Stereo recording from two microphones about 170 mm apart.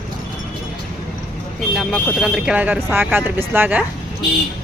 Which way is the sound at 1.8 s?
Centre (ahead or behind).